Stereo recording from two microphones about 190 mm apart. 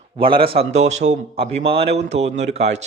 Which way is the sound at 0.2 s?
25° right (ahead or behind).